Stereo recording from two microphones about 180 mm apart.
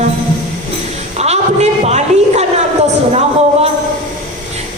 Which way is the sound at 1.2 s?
35° right (ahead or behind).